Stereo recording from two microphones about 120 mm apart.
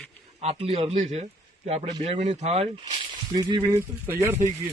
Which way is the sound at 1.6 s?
60° right (ahead or behind).